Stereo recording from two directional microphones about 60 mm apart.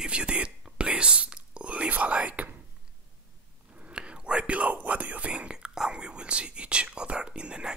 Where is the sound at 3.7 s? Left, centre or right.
Centre.